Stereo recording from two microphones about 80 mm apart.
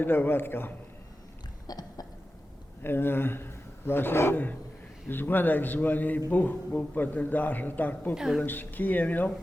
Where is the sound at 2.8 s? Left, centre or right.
Left.